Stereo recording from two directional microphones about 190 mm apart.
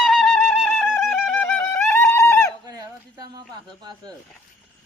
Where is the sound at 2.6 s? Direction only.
20° right (ahead or behind).